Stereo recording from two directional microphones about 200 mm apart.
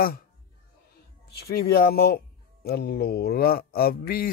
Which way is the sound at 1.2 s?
55° left (ahead or behind).